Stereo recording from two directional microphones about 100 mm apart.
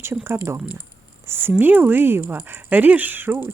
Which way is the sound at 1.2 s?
25° right (ahead or behind).